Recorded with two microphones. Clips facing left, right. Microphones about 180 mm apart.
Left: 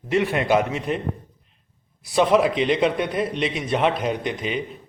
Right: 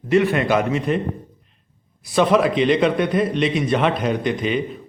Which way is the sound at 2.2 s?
10° left (ahead or behind).